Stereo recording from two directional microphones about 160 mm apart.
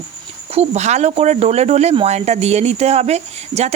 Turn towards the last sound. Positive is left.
turn(degrees=-40)  # may be behind; listen again after turning